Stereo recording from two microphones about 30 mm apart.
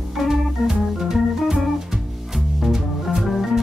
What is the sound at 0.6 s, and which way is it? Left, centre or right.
Organ, centre.